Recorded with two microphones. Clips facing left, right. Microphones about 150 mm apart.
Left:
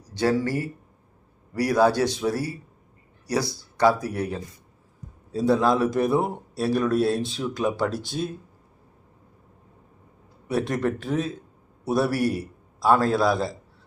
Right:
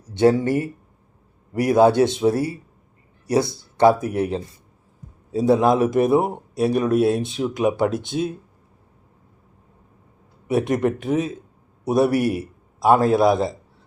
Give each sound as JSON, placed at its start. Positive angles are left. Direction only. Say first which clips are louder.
{"t": 0.0, "sound": "a man's voice", "louder": "right 6 dB", "side_deg": -25}
{"t": 5.5, "sound": "a man's voice", "louder": "right 4 dB", "side_deg": -20}
{"t": 10.5, "sound": "a man's voice", "louder": "right 5 dB", "side_deg": -20}